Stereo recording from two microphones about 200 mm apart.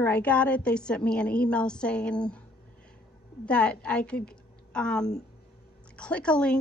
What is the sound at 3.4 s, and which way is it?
A woman's voice, 5° left (ahead or behind).